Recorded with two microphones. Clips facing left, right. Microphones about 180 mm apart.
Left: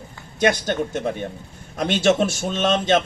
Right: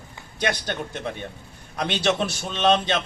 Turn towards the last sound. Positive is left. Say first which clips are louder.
# left 2 dB
turn(degrees=50)  # may be behind; listen again after turning